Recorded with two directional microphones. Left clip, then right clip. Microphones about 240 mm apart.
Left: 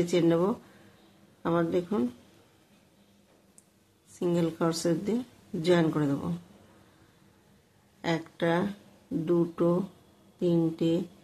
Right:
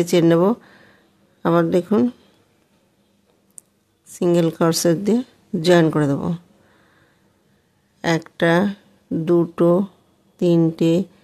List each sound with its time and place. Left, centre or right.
0.0 s speech: right
4.2 s speech: right
8.0 s speech: right